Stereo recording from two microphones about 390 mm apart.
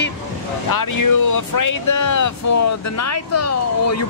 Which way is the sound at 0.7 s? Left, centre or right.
Left.